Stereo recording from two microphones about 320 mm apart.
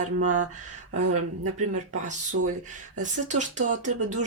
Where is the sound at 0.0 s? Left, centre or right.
Right.